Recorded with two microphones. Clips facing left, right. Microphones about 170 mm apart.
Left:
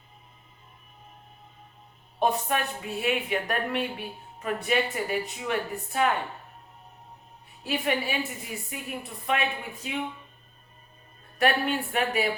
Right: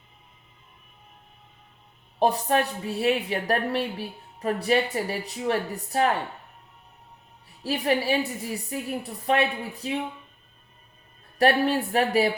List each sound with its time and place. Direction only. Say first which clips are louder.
2.1 s a woman's voice: right 4 dB; 35° right (ahead or behind)
7.6 s a woman's voice: right 3 dB; 35° right (ahead or behind)
11.3 s a woman's voice: right 4 dB; 35° right (ahead or behind)